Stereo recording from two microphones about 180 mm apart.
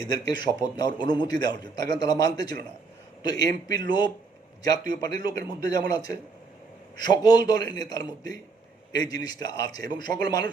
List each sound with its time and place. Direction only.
0.1 s a man's voice: 20° left (ahead or behind)